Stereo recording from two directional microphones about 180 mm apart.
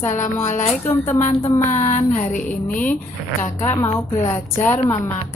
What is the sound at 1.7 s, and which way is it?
Speech, 40° left (ahead or behind).